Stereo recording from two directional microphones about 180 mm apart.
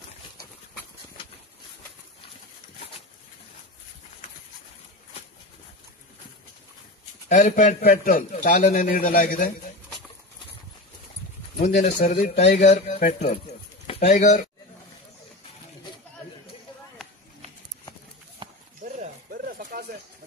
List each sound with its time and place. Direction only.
7.2 s a man's voice: 45° left (ahead or behind)
11.6 s speech: 40° left (ahead or behind)
18.4 s clip-clop: 25° right (ahead or behind)
18.9 s a sound: 50° right (ahead or behind)